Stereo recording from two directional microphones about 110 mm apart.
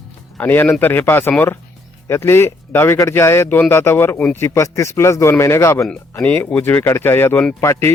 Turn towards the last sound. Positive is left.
turn(degrees=25)  # may be behind; listen again after turning